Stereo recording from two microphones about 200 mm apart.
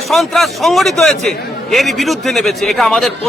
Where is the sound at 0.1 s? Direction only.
Centre (ahead or behind).